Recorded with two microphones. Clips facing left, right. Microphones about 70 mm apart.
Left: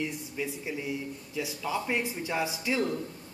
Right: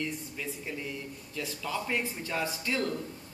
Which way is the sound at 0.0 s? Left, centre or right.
Centre.